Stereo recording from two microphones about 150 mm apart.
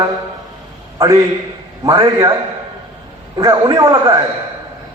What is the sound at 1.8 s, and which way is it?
Speech, 20° right (ahead or behind).